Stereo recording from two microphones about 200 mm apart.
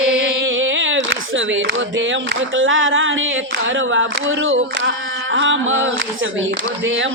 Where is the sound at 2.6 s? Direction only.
80° right.